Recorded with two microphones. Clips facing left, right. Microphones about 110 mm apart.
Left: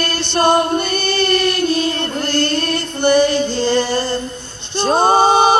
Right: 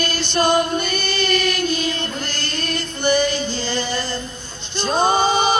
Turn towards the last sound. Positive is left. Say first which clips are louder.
# left 6 dB
turn(degrees=60)  # may be behind; listen again after turning